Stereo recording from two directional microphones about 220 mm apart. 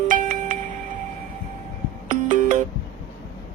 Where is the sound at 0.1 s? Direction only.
35° right (ahead or behind).